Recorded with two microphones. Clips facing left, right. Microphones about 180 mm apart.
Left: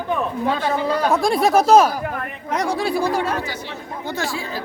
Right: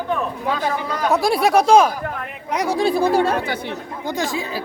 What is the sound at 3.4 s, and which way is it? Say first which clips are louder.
Speech: right 4 dB; 55° right (ahead or behind).